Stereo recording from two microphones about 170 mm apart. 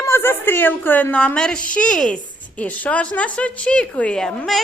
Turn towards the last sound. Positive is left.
turn(degrees=5)  # may be behind; listen again after turning